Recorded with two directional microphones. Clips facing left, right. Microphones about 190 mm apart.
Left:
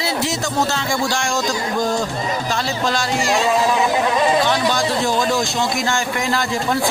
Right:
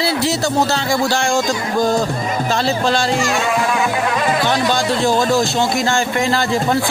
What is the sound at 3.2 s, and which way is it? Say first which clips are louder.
Music: left 1 dB; 30° left (ahead or behind).